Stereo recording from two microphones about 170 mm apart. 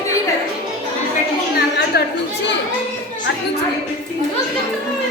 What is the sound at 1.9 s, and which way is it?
Chatter, 70° left (ahead or behind).